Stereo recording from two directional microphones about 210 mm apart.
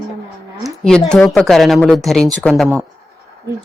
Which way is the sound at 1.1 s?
5° left (ahead or behind).